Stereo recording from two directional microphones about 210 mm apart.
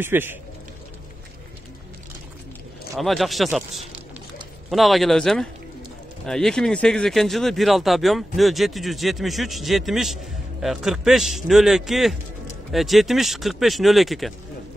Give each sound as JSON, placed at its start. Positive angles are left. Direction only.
{"t": 0.0, "sound": "speech", "side_deg": -10}
{"t": 3.0, "sound": "speech", "side_deg": 0}